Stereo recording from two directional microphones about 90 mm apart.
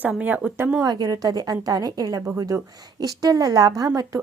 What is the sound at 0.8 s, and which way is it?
A woman's voice, 45° right (ahead or behind).